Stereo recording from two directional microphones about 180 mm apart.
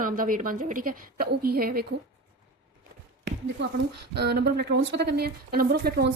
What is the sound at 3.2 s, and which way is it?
Speech, 70° right (ahead or behind).